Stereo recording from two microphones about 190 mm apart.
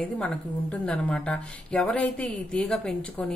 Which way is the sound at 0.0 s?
5° left (ahead or behind).